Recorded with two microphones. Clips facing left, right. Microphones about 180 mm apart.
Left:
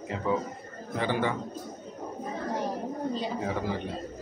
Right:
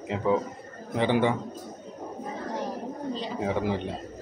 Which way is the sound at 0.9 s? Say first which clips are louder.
Right 5 dB; 20° right (ahead or behind).